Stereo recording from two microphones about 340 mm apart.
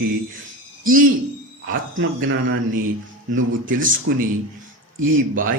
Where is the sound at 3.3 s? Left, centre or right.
Right.